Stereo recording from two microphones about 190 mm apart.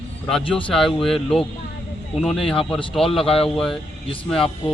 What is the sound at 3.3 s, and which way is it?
Speech, 30° left (ahead or behind).